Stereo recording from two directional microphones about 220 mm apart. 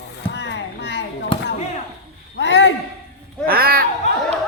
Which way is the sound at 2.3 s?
55° left (ahead or behind).